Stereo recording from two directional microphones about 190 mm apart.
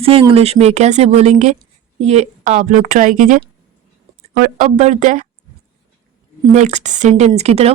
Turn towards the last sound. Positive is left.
turn(degrees=-35)  # may be behind; listen again after turning